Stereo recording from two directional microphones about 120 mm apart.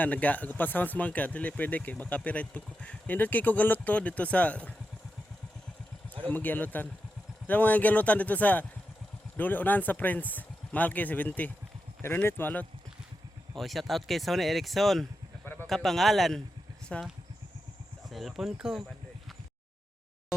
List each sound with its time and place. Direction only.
0.0 s speech: 10° left (ahead or behind)
6.2 s speech: 15° left (ahead or behind)
13.5 s speech: centre (ahead or behind)
18.1 s speech: centre (ahead or behind)